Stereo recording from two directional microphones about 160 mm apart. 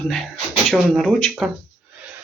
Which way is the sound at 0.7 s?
Centre (ahead or behind).